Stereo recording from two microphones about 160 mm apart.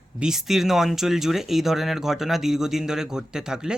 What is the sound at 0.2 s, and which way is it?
Speech, 5° right (ahead or behind).